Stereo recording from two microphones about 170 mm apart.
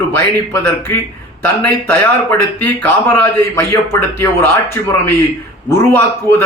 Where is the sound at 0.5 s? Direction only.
15° left (ahead or behind).